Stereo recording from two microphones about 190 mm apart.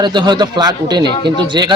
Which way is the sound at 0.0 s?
20° right (ahead or behind).